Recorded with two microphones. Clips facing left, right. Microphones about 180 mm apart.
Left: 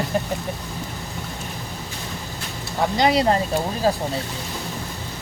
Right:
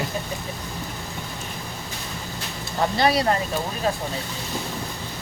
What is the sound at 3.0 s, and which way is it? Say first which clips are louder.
Speech: left 3 dB; 20° left (ahead or behind).